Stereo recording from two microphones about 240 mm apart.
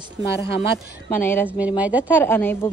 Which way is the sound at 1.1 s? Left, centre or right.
Centre.